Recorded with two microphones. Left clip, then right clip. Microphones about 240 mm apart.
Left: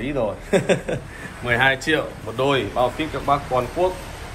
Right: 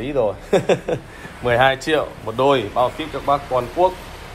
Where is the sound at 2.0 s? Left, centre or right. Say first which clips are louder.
Right 4 dB; centre.